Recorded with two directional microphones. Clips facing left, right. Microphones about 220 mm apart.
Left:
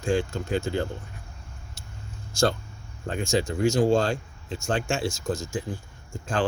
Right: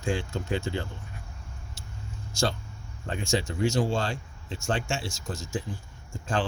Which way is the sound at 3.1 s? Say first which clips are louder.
Left 3 dB; 45° left (ahead or behind).